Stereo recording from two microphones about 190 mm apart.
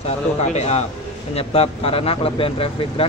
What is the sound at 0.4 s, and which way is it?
Speech, 35° left (ahead or behind).